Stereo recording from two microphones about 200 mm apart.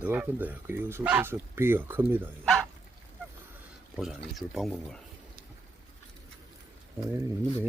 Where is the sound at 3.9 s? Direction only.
Centre (ahead or behind).